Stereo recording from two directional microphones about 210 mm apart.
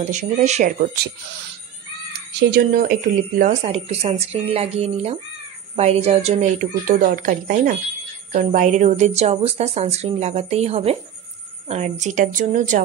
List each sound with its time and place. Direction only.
0.1 s speech: 35° right (ahead or behind)
2.3 s speech: 45° right (ahead or behind)